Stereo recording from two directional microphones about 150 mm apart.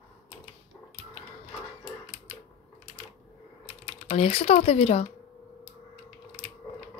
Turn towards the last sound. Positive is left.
turn(degrees=45)  # may be behind; listen again after turning